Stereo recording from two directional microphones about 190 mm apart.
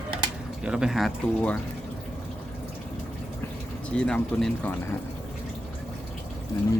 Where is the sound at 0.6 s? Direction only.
5° right (ahead or behind).